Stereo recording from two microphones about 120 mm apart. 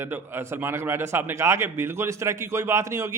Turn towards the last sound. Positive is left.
turn(degrees=-25)  # may be behind; listen again after turning